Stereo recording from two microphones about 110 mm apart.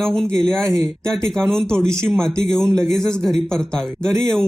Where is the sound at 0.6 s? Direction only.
30° right (ahead or behind).